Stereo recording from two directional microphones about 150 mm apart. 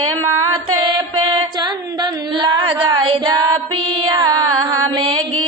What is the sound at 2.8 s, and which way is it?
Female singing, 30° right (ahead or behind).